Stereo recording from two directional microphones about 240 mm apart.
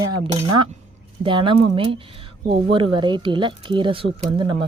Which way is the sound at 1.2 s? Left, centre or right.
Right.